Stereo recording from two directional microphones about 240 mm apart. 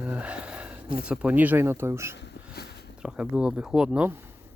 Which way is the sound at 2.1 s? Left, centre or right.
Left.